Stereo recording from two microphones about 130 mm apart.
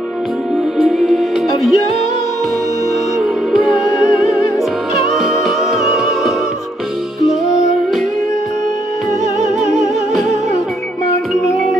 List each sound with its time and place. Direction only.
0.7 s music: 5° right (ahead or behind)
3.2 s music: centre (ahead or behind)